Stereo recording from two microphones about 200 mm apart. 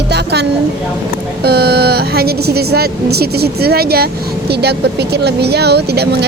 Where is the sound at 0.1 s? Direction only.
55° right (ahead or behind).